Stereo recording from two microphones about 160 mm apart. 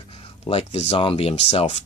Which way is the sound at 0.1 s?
35° left (ahead or behind).